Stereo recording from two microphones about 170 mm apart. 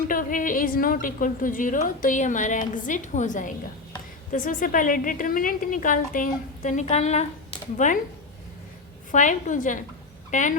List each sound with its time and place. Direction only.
0.1 s a woman's voice: 55° left (ahead or behind)
9.1 s a woman's voice: 50° left (ahead or behind)